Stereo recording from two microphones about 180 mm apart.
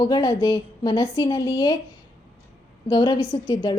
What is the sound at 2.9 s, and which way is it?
Speech, 20° left (ahead or behind).